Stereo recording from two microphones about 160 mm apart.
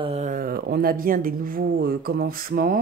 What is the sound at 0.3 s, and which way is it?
Speech, 70° right (ahead or behind).